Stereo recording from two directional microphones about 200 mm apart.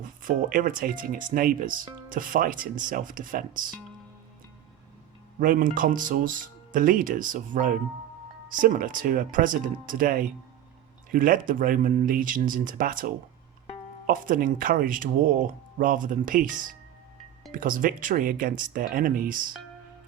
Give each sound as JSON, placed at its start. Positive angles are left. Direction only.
{"t": 0.0, "sound": "speech", "side_deg": -40}
{"t": 5.4, "sound": "speech", "side_deg": -45}